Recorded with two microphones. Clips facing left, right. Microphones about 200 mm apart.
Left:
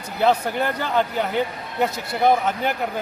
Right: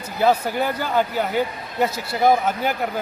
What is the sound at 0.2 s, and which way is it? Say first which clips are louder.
A man's voice: right 1 dB; 5° right (ahead or behind).